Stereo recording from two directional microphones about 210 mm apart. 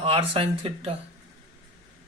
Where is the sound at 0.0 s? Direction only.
25° right (ahead or behind).